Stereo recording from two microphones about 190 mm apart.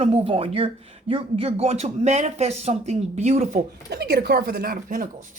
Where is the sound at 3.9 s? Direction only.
55° right (ahead or behind).